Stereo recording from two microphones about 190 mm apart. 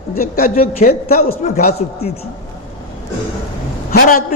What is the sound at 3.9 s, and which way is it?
Speech, 50° left (ahead or behind).